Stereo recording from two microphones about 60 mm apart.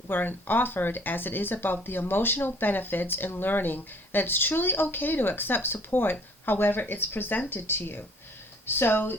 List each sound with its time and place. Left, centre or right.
0.1 s speech: left